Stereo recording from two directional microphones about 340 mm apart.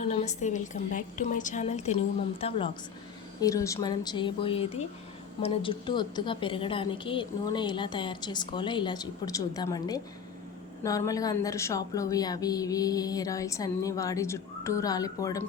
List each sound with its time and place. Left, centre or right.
0.1 s a woman's voice: centre